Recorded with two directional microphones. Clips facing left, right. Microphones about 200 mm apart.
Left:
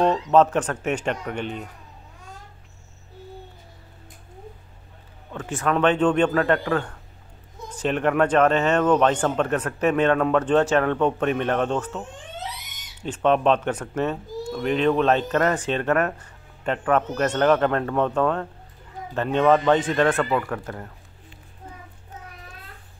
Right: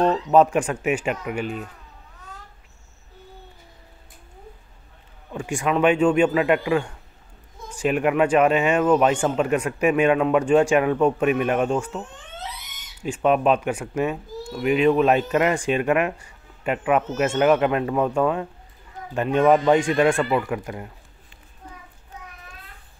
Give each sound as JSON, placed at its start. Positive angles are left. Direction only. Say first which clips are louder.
{"t": 0.0, "sound": "speech", "louder": "right 1 dB", "side_deg": -10}
{"t": 5.3, "sound": "speech", "louder": "right 1 dB", "side_deg": -10}
{"t": 13.0, "sound": "speech", "louder": "even", "side_deg": -10}